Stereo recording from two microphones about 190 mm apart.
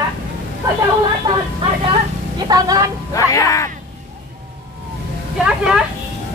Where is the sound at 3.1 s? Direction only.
15° left (ahead or behind).